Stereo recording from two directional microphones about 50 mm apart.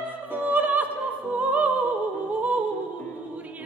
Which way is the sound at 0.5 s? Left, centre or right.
Right.